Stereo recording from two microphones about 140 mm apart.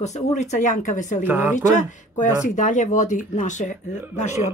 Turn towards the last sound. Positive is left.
turn(degrees=55)  # may be behind; listen again after turning